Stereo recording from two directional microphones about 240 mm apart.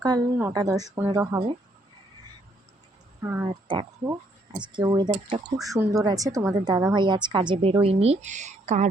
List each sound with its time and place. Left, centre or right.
0.0 s a woman's voice: centre
3.2 s a woman's voice: centre; by 8.9 s right